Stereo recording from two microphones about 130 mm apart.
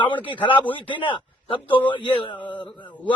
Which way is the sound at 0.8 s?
40° left (ahead or behind).